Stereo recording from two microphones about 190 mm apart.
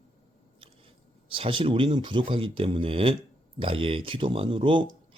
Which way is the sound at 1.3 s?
30° right (ahead or behind).